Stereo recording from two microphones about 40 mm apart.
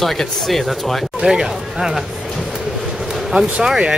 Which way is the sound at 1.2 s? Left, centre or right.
Centre.